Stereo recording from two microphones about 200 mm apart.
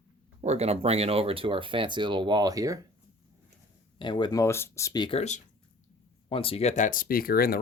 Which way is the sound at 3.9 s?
20° left (ahead or behind).